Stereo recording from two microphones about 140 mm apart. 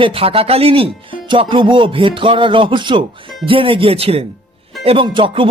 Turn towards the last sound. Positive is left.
turn(degrees=-35)  # may be behind; listen again after turning